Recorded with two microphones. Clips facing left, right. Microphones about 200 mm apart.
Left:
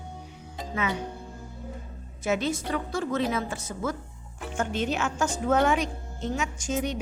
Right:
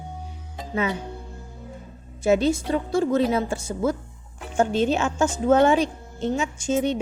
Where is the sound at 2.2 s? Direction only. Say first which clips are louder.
Right 7 dB; 30° right (ahead or behind).